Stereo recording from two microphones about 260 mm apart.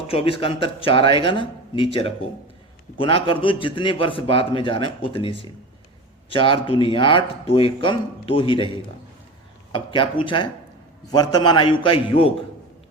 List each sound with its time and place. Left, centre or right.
0.1 s a man's voice: left